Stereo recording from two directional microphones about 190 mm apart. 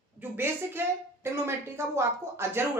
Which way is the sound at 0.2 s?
10° right (ahead or behind).